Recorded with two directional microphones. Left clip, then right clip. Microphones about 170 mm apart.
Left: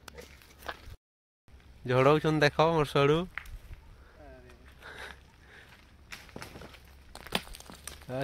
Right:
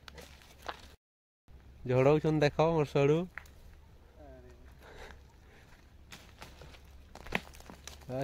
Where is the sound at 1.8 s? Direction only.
Centre (ahead or behind).